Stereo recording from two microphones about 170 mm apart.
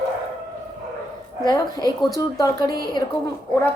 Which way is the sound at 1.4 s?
25° left (ahead or behind).